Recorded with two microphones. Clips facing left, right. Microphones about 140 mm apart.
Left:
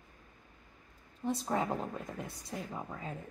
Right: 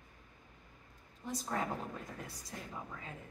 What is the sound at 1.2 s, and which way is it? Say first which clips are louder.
Speech: left 6 dB; 25° left (ahead or behind).